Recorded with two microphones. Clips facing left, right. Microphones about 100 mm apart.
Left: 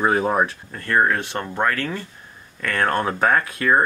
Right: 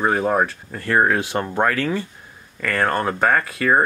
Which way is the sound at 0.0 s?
5° left (ahead or behind).